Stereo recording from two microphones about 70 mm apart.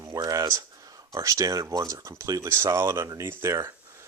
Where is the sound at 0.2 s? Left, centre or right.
Right.